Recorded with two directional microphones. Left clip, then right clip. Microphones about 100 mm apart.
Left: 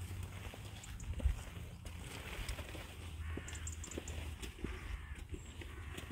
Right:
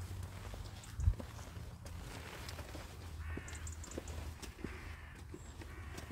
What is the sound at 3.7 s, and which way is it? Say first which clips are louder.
Clip-clop: even; 50° left (ahead or behind).